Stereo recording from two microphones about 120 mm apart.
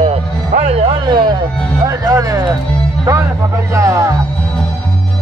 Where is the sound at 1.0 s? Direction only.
40° right (ahead or behind).